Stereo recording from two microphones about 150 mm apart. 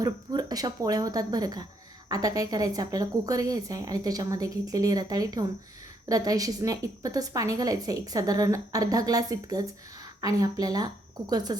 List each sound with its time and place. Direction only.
0.0 s a woman's voice: 25° right (ahead or behind)